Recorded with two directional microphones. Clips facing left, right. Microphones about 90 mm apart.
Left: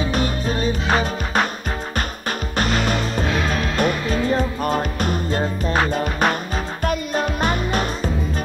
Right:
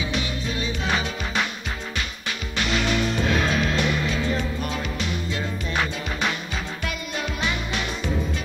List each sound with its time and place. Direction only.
0.0 s music: 45° left (ahead or behind)